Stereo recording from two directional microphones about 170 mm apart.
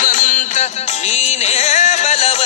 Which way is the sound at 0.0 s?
50° left (ahead or behind).